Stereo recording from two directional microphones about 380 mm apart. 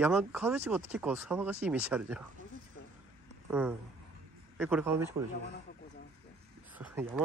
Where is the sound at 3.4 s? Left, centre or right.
Centre.